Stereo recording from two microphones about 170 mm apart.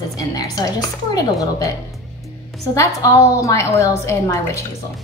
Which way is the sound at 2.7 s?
20° left (ahead or behind).